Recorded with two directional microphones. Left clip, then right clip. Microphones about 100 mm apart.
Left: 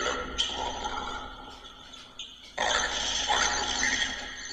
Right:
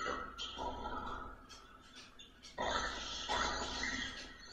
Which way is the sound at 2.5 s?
30° left (ahead or behind).